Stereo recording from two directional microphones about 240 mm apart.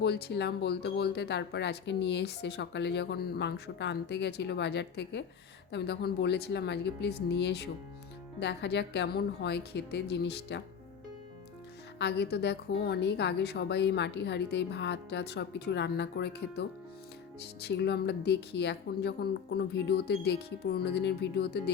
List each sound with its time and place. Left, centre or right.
0.0 s speech: left
11.9 s speech: left